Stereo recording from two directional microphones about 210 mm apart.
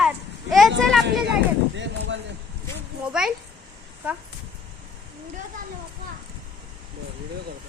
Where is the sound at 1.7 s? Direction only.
60° right (ahead or behind).